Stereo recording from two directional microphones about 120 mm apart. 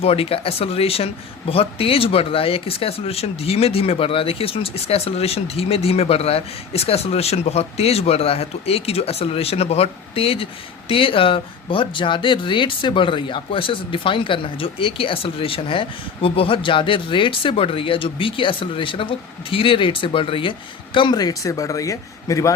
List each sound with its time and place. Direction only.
0.0 s speech: 55° left (ahead or behind); by 22.5 s 25° left (ahead or behind)